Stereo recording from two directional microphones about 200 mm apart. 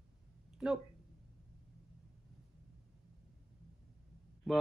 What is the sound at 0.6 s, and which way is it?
Speech, centre (ahead or behind).